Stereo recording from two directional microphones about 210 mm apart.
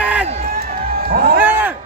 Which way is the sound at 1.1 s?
45° right (ahead or behind).